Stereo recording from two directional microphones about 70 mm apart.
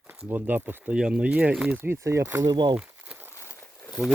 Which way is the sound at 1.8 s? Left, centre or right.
Right.